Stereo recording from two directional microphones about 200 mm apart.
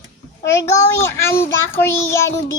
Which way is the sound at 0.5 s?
15° left (ahead or behind).